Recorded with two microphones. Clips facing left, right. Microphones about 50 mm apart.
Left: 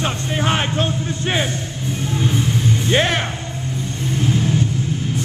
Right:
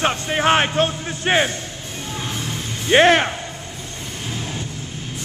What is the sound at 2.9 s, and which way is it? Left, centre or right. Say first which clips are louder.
Speech: right 7 dB; right.